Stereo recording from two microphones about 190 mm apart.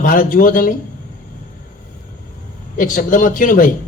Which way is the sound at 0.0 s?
45° left (ahead or behind).